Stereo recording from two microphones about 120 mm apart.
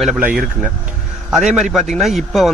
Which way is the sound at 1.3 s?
5° right (ahead or behind).